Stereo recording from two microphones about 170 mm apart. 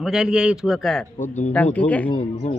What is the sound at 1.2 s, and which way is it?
Speech, 45° left (ahead or behind).